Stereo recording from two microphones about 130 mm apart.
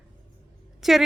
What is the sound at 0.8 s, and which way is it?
Speech, centre (ahead or behind).